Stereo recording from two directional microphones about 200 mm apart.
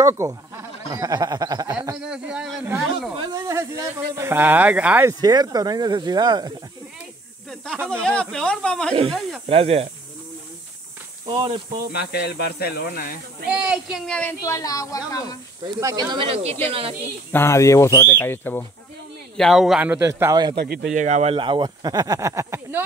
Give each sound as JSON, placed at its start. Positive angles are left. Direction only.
{"t": 0.0, "sound": "speech", "side_deg": -15}
{"t": 2.0, "sound": "speech", "side_deg": -5}
{"t": 5.2, "sound": "speech", "side_deg": -20}
{"t": 7.7, "sound": "speech", "side_deg": -10}
{"t": 8.0, "sound": "speech", "side_deg": 5}
{"t": 9.5, "sound": "speech", "side_deg": -30}
{"t": 11.2, "sound": "speech", "side_deg": -25}
{"t": 11.9, "sound": "speech", "side_deg": 50}
{"t": 13.5, "sound": "speech", "side_deg": -5}
{"t": 15.8, "sound": "speech", "side_deg": -20}
{"t": 17.3, "sound": "speech", "side_deg": 10}
{"t": 20.5, "sound": "speech", "side_deg": -50}
{"t": 20.9, "sound": "speech", "side_deg": -35}